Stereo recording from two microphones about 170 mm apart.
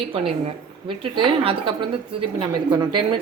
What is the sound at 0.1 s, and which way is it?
A woman's voice, 35° right (ahead or behind).